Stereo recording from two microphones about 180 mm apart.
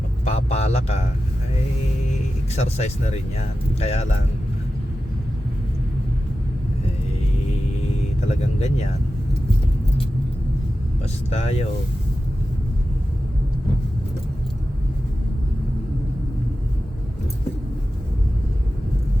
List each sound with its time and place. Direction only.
0.3 s a sound: 35° left (ahead or behind)
2.6 s speech: 40° left (ahead or behind)
8.3 s speech: 40° left (ahead or behind)
11.0 s speech: 35° left (ahead or behind)